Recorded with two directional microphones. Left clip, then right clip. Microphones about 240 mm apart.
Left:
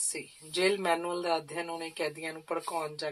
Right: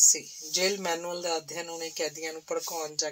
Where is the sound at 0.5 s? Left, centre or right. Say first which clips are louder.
Even; right.